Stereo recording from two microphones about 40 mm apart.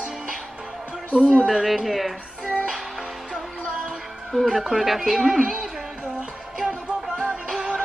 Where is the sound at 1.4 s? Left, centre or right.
Centre.